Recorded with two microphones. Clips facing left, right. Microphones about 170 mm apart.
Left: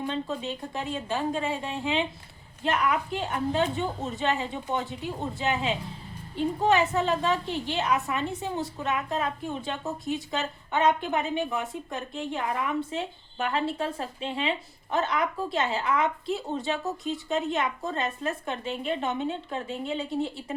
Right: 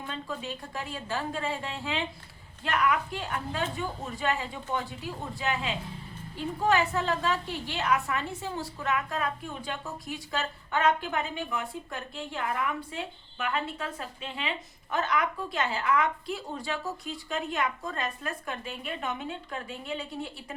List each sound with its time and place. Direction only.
0.0 s a woman's voice: 20° left (ahead or behind)